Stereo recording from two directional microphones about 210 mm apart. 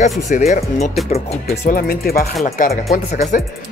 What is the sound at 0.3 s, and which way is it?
Speech, 30° left (ahead or behind).